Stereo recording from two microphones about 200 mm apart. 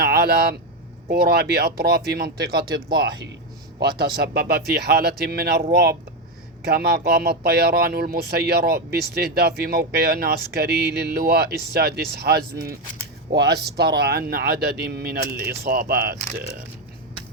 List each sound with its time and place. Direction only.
0.0 s speech: 55° right (ahead or behind)
3.8 s speech: 50° right (ahead or behind)